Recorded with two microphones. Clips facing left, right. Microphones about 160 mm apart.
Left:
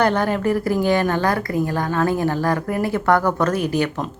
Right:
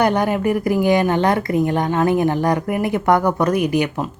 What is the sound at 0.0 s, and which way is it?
Speech, 15° right (ahead or behind).